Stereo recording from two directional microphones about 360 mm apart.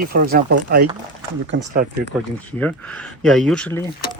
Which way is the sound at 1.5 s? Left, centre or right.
Right.